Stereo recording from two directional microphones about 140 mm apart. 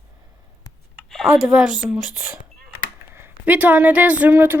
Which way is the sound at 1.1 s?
5° right (ahead or behind).